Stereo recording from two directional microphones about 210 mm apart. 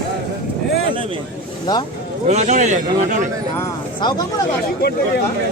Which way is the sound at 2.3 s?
35° right (ahead or behind).